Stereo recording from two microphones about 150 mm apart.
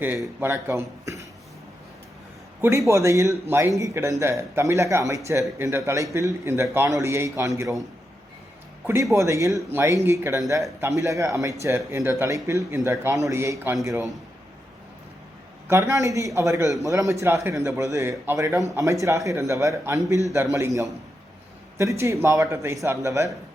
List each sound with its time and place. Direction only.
0.3 s speech: 15° right (ahead or behind)
2.6 s a man's voice: 20° right (ahead or behind)
9.1 s a man's voice: 20° right (ahead or behind)
15.6 s a man's voice: 20° right (ahead or behind)